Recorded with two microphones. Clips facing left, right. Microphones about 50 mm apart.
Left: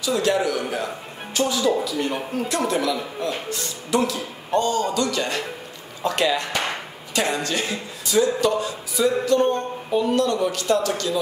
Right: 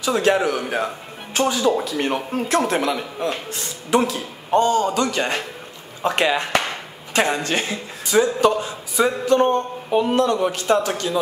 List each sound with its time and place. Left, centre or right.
0.0 s a man's voice: right
10.1 s a man's voice: right